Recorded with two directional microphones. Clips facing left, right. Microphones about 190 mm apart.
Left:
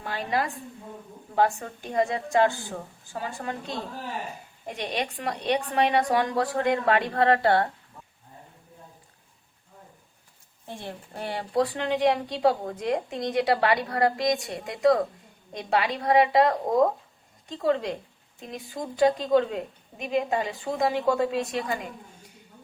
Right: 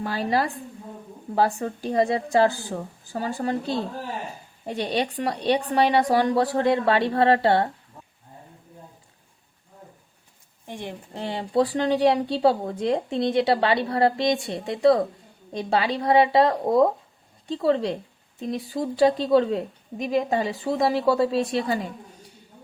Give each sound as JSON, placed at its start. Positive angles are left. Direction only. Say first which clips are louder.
{"t": 0.0, "sound": "a woman's voice", "louder": "right 4 dB", "side_deg": -35}
{"t": 10.7, "sound": "a woman's voice", "louder": "right 3 dB", "side_deg": -15}